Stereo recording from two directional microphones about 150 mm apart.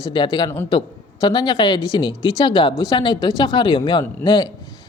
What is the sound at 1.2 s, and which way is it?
A woman's voice, 30° left (ahead or behind).